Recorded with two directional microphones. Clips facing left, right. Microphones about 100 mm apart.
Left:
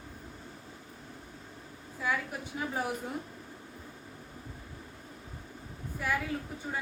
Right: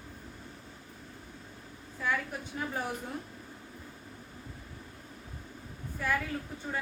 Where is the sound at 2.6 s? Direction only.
10° left (ahead or behind).